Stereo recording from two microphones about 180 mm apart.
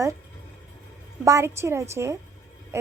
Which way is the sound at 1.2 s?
15° right (ahead or behind).